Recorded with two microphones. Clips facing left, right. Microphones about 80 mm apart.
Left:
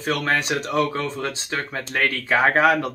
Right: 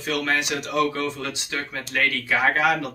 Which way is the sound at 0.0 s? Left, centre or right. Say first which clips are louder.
Left 2 dB; left.